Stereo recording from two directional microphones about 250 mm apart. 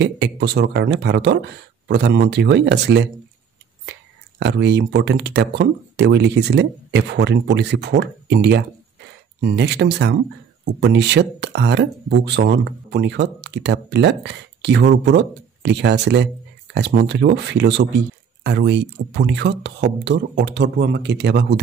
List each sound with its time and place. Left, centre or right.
0.0 s speech: right